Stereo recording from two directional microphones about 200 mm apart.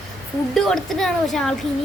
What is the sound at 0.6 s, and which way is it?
Child singing, centre (ahead or behind).